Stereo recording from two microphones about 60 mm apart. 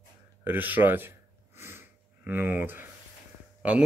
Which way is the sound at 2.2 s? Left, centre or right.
Right.